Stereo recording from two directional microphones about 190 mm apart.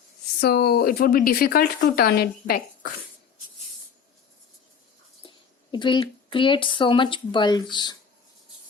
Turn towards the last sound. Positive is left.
turn(degrees=25)  # may be behind; listen again after turning